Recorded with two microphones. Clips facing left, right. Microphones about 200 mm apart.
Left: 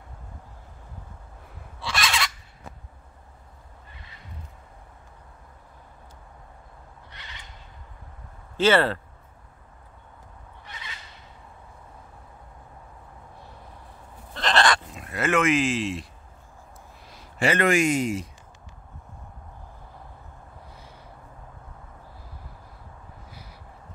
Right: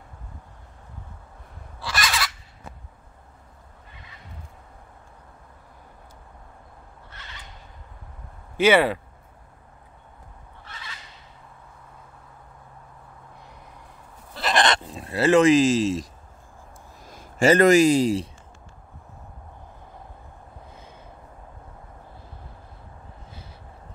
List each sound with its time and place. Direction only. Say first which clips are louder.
1.8 s fowl: even; centre (ahead or behind)
8.5 s speech: right 2 dB; 15° right (ahead or behind)
14.3 s goat: even; 5° right (ahead or behind)
14.6 s a sound: right 1 dB; 25° right (ahead or behind)
17.0 s speech: right 5 dB; 45° right (ahead or behind)